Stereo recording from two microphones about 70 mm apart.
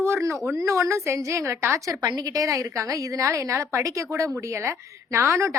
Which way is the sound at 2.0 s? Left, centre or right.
Right.